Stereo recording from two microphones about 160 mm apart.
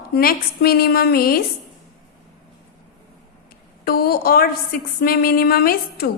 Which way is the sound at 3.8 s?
70° left (ahead or behind).